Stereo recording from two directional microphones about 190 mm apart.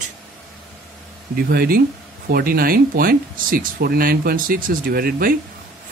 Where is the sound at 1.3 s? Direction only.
50° right (ahead or behind).